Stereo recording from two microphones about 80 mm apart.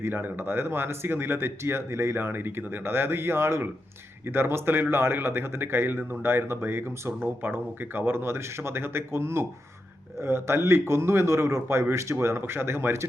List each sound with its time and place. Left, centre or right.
0.0 s a man's voice: right